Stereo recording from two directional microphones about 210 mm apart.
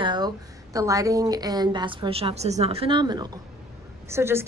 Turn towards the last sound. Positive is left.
turn(degrees=-10)  # may be behind; listen again after turning